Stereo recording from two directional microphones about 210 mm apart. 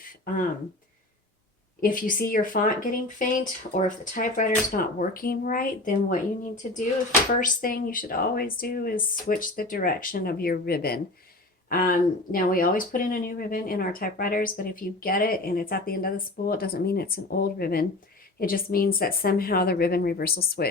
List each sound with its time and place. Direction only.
1.8 s speech: 40° left (ahead or behind)